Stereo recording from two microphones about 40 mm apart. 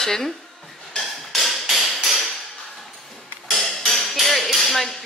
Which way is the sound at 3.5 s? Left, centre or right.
Centre.